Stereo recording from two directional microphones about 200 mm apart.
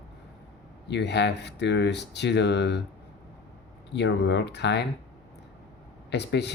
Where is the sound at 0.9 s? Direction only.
60° left (ahead or behind).